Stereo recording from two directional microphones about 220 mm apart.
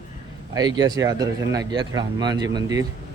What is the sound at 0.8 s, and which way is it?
A man's voice, 15° right (ahead or behind).